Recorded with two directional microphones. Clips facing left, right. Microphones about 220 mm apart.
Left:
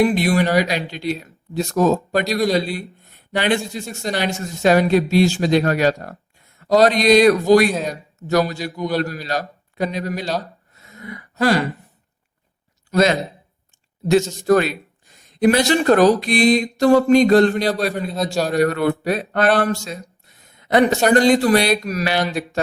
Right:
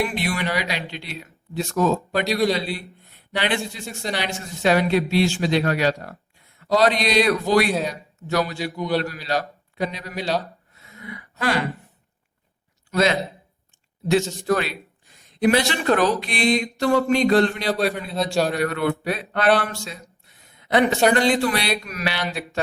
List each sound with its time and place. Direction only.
0.1 s a man's voice: 40° left (ahead or behind)
10.8 s gasp: 40° left (ahead or behind)
12.9 s speech: 45° left (ahead or behind)
14.4 s speech: 45° left (ahead or behind)